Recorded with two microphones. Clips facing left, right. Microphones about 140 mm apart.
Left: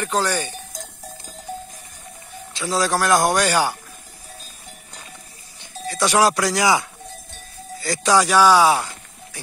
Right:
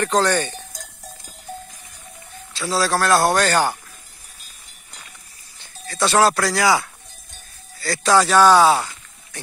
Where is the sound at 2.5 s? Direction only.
15° left (ahead or behind).